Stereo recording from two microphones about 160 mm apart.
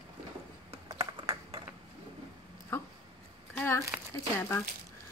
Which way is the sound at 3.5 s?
15° left (ahead or behind).